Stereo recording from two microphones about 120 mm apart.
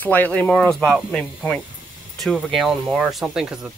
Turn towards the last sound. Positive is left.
turn(degrees=-5)  # may be behind; listen again after turning